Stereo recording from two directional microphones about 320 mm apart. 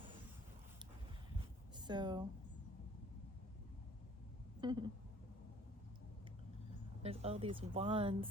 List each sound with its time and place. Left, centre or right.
1.7 s a sound: centre
4.6 s speech: centre
7.0 s speech: centre